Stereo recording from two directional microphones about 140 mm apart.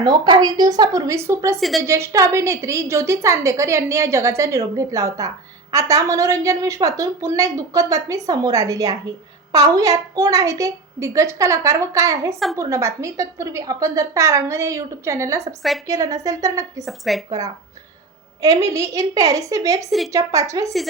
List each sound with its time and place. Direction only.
0.0 s a woman's voice: 30° right (ahead or behind)
16.8 s speech: centre (ahead or behind)
18.4 s a woman's voice: 25° right (ahead or behind)